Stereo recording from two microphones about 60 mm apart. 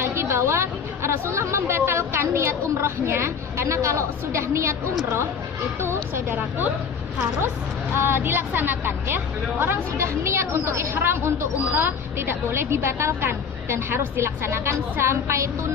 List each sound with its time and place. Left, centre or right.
0.0 s a woman's voice: right
5.8 s a woman's voice: right
7.9 s a woman's voice: right
9.9 s a woman's voice: right